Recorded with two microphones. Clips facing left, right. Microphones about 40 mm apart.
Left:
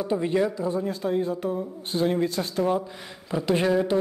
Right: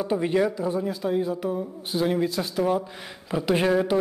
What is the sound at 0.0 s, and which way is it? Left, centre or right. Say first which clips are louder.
Speech: right 1 dB; right.